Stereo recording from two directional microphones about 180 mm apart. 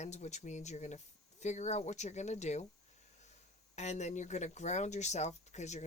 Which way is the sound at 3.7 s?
40° left (ahead or behind).